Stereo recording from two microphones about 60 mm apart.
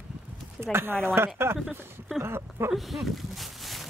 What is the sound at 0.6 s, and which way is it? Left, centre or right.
Speech, right.